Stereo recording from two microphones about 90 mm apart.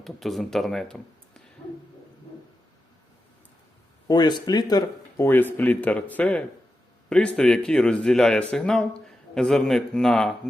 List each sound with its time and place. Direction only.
0.0 s speech: centre (ahead or behind)
4.1 s speech: 55° left (ahead or behind)
5.1 s speech: 25° left (ahead or behind); by 10.3 s 5° left (ahead or behind)